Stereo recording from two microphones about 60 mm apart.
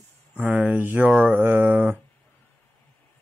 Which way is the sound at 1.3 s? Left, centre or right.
Right.